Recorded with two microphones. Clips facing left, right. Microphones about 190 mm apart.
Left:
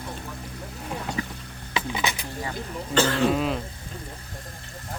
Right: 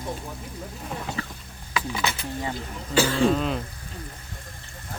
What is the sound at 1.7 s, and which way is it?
Dishes, 20° left (ahead or behind).